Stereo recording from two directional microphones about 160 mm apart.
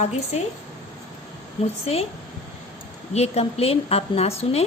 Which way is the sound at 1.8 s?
40° left (ahead or behind).